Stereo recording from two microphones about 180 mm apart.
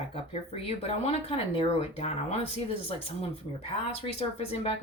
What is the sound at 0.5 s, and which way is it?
Speech, 35° left (ahead or behind).